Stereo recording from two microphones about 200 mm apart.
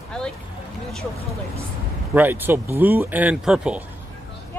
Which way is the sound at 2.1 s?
10° right (ahead or behind).